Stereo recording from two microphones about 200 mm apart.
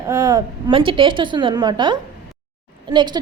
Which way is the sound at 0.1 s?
15° right (ahead or behind).